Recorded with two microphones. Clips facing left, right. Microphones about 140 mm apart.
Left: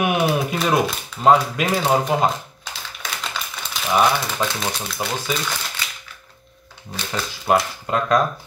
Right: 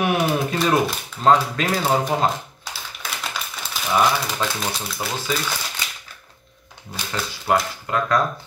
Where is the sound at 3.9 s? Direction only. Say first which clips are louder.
Left 1 dB; 10° left (ahead or behind).